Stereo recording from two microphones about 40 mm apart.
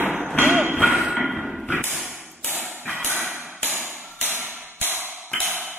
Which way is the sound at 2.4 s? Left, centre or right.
Right.